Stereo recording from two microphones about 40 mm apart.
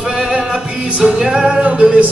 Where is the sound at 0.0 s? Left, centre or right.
Right.